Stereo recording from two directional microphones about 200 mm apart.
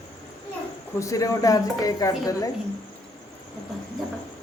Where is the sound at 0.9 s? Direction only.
15° left (ahead or behind).